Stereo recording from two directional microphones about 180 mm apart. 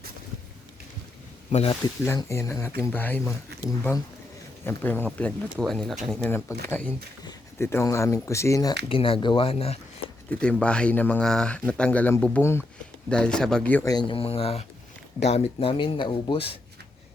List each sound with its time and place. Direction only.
1.5 s speech: 35° left (ahead or behind)
2.0 s speech: 15° left (ahead or behind)
8.9 s speech: 30° left (ahead or behind)
10.4 s speech: 5° left (ahead or behind)
13.8 s speech: 25° left (ahead or behind)